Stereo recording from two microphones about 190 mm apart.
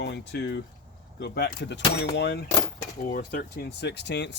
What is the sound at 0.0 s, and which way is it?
Speech, 65° left (ahead or behind).